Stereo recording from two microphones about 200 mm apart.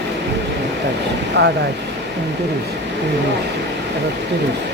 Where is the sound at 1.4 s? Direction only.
60° right (ahead or behind).